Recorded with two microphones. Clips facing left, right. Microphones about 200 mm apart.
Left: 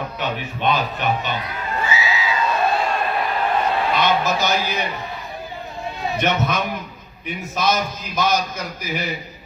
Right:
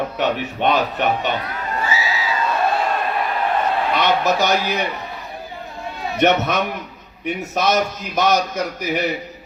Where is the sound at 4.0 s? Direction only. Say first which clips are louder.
Right 4 dB; 65° right (ahead or behind).